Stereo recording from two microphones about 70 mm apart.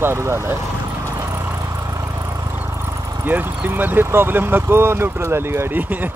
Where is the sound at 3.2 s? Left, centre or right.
Right.